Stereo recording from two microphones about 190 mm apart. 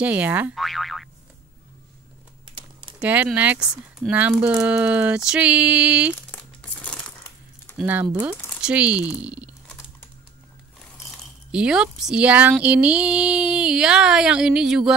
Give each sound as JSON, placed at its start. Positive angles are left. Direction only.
{"t": 0.0, "sound": "speech", "side_deg": -10}
{"t": 3.0, "sound": "speech", "side_deg": -5}
{"t": 6.3, "sound": "crumpling", "side_deg": 5}
{"t": 7.7, "sound": "speech", "side_deg": -10}
{"t": 11.5, "sound": "speech", "side_deg": -5}